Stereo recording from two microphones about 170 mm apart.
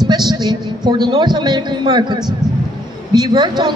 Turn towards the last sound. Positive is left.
turn(degrees=-25)  # may be behind; listen again after turning